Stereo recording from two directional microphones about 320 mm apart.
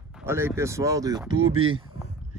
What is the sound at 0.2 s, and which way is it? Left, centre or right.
Speech, centre.